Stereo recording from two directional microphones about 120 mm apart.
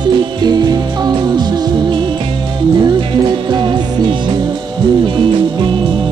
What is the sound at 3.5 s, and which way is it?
Music, 35° right (ahead or behind).